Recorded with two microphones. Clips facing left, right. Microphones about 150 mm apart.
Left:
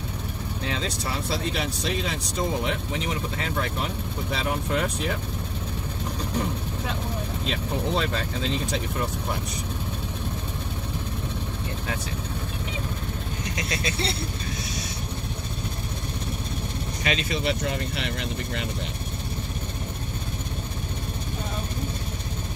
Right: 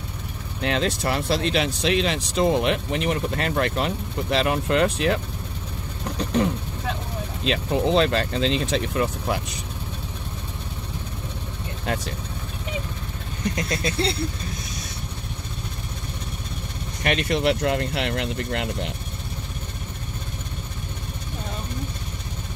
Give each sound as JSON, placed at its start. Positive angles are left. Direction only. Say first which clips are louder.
{"t": 0.7, "sound": "speech", "louder": "right 8 dB", "side_deg": -70}
{"t": 6.1, "sound": "vehicle", "louder": "right 7 dB", "side_deg": -80}
{"t": 7.4, "sound": "speech", "louder": "right 7 dB", "side_deg": -90}
{"t": 13.6, "sound": "vehicle", "louder": "right 2 dB", "side_deg": -50}
{"t": 17.1, "sound": "speech", "louder": "right 5 dB", "side_deg": -70}